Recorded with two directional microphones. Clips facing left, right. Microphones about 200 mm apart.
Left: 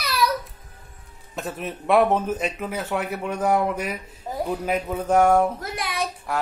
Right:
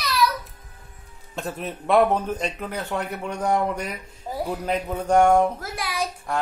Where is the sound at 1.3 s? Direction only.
Centre (ahead or behind).